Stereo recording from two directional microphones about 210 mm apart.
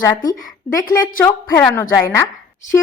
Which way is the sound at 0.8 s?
15° left (ahead or behind).